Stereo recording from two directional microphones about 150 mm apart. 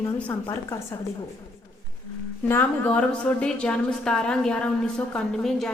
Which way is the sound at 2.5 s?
10° left (ahead or behind).